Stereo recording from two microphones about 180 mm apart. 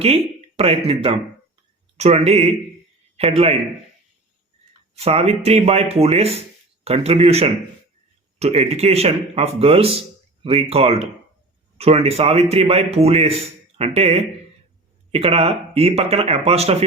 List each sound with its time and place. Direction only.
0.0 s a man's voice: 35° right (ahead or behind)
4.9 s a man's voice: 35° right (ahead or behind)